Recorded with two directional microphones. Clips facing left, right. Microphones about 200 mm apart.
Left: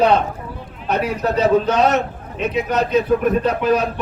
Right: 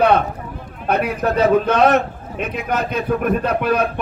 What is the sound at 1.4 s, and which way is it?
A man's voice, 55° right (ahead or behind).